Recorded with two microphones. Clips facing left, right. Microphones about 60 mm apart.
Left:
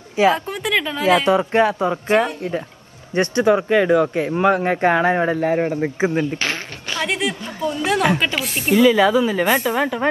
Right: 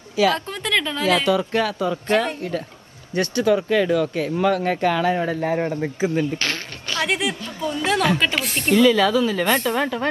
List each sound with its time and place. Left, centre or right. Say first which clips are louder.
0.1 s a woman's voice: left 3 dB; left
0.5 s speech: left 2 dB; centre
1.0 s speech: left 5 dB; left
5.5 s speech: left 3 dB; centre
6.3 s a sound: left 2 dB; centre
7.0 s speech: even; centre
8.0 s speech: left 2 dB; centre
8.4 s speech: left 1 dB; centre